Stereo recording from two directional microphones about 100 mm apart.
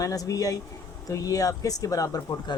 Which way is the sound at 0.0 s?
35° left (ahead or behind).